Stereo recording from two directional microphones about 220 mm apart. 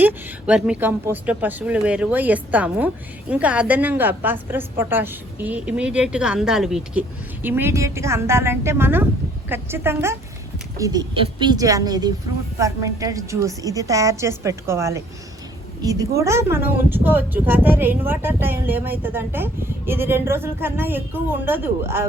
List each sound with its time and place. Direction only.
0.0 s speech: 5° right (ahead or behind)